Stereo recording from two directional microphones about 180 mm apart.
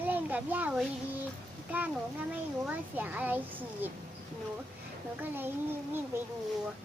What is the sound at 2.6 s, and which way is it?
A child's voice, 10° right (ahead or behind).